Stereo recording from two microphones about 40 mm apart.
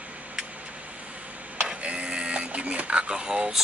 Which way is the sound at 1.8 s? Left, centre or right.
Right.